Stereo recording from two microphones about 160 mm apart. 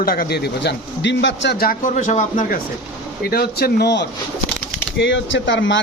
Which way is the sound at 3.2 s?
75° left (ahead or behind).